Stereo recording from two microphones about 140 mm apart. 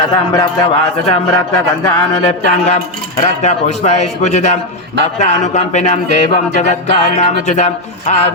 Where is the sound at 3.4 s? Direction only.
55° left (ahead or behind).